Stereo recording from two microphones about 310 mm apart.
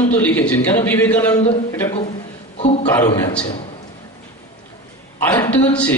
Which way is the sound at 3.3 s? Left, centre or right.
Centre.